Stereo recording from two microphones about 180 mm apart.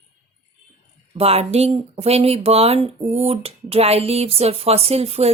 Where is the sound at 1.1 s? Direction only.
35° right (ahead or behind).